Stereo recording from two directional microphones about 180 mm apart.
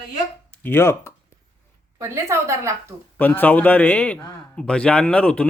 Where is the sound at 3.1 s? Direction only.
10° left (ahead or behind).